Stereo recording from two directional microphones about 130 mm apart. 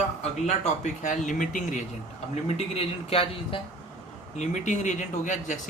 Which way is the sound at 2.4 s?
50° left (ahead or behind).